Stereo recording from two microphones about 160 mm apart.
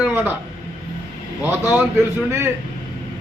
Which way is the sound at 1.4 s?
15° right (ahead or behind).